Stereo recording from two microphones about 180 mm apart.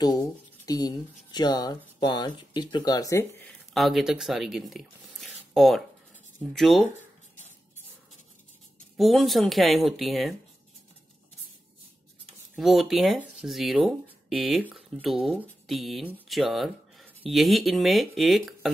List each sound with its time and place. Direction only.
0.7 s speech: 20° left (ahead or behind)
3.7 s speech: centre (ahead or behind)
8.9 s speech: centre (ahead or behind)
12.5 s speech: centre (ahead or behind)